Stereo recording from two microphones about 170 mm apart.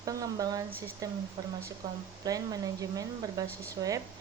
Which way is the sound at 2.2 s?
20° right (ahead or behind).